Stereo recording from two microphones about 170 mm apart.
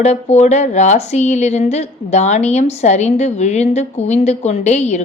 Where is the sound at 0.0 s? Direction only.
40° left (ahead or behind).